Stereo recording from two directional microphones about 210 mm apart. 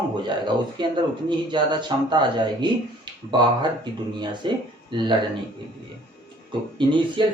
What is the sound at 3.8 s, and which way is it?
Speech, 20° right (ahead or behind).